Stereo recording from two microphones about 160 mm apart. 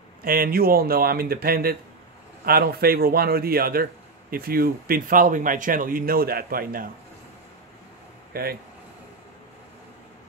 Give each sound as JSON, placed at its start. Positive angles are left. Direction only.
{"t": 0.2, "sound": "a man's voice", "side_deg": -65}
{"t": 8.3, "sound": "speech", "side_deg": -75}